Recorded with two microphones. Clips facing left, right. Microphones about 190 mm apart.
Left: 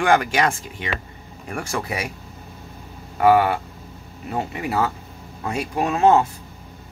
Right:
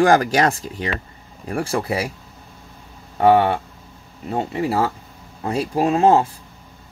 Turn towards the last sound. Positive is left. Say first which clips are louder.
# right 2 dB
turn(degrees=-30)  # may be behind; listen again after turning